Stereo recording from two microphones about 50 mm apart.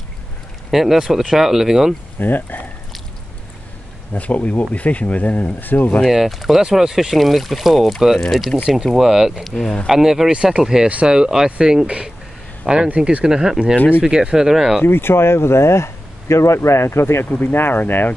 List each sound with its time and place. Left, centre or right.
0.7 s speech: centre
2.1 s speech: left
4.1 s speech: left
6.0 s speech: centre
6.6 s speech: centre
10.3 s speech: centre
10.9 s speech: right
11.1 s speech: centre
13.2 s speech: centre
14.8 s speech: left
17.3 s speech: left